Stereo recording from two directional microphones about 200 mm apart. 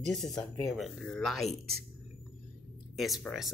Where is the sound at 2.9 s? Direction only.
Centre (ahead or behind).